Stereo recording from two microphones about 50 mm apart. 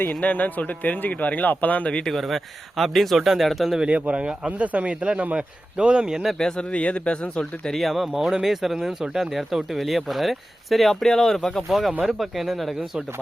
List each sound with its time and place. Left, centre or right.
0.1 s speech: left
1.9 s speech: left
2.1 s speech: centre
3.8 s speech: right
6.4 s speech: left
7.8 s speech: centre